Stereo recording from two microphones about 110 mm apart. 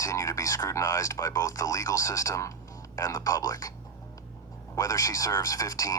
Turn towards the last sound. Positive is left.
turn(degrees=30)  # may be behind; listen again after turning